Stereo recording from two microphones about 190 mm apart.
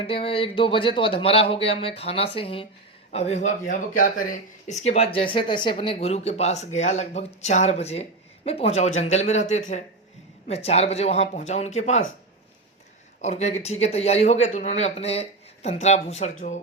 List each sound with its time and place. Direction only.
0.0 s a man's voice: 30° left (ahead or behind)
13.2 s speech: 35° left (ahead or behind)